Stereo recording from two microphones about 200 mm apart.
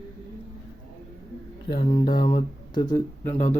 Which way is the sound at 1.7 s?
25° left (ahead or behind).